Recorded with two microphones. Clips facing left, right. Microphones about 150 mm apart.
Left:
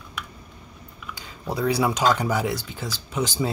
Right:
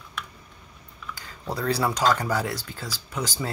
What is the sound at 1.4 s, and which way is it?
Speech, 10° left (ahead or behind).